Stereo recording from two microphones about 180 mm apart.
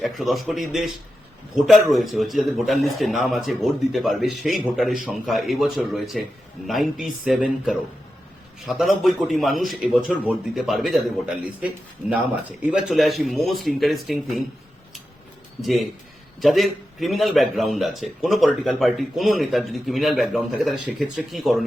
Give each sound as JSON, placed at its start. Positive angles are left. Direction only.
{"t": 0.0, "sound": "a man's voice", "side_deg": 0}
{"t": 16.4, "sound": "a man's voice", "side_deg": 0}